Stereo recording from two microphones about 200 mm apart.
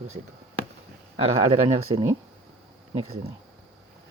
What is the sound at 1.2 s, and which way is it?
Speech, 30° right (ahead or behind).